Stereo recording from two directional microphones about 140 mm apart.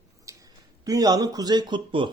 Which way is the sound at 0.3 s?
25° right (ahead or behind).